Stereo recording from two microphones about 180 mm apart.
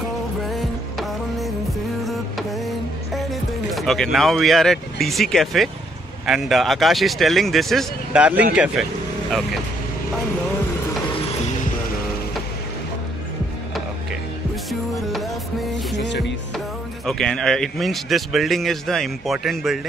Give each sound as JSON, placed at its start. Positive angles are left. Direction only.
{"t": 0.5, "sound": "music", "side_deg": 0}
{"t": 2.0, "sound": "printer", "side_deg": 0}
{"t": 3.2, "sound": "speech", "side_deg": 0}
{"t": 14.7, "sound": "music", "side_deg": 0}
{"t": 16.0, "sound": "music", "side_deg": 75}
{"t": 16.5, "sound": "speech", "side_deg": 0}